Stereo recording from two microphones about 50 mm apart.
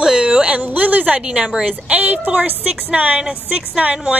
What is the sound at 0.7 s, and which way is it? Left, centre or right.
Speech, right.